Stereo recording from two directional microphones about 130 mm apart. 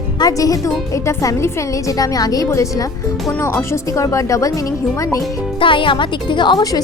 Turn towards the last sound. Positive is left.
turn(degrees=35)  # may be behind; listen again after turning